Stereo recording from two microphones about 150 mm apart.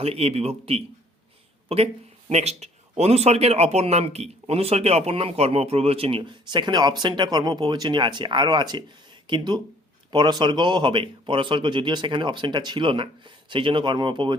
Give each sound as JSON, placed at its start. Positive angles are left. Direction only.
{"t": 0.0, "sound": "speech", "side_deg": -40}
{"t": 2.3, "sound": "speech", "side_deg": -45}